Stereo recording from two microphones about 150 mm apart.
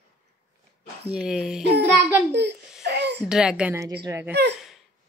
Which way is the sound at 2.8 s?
90° right.